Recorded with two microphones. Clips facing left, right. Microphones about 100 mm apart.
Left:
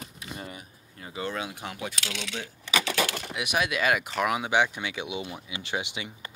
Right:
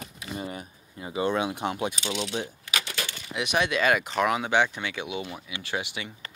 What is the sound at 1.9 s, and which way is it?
Speech, 90° left.